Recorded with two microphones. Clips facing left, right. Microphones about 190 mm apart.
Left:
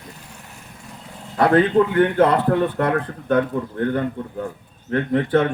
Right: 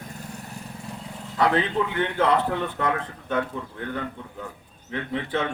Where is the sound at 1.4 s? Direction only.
50° left (ahead or behind).